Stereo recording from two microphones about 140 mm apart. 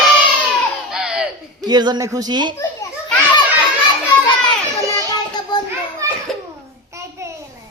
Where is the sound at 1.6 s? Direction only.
30° right (ahead or behind).